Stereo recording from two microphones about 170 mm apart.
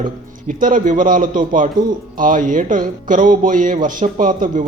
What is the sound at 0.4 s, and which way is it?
Speech, 50° right (ahead or behind).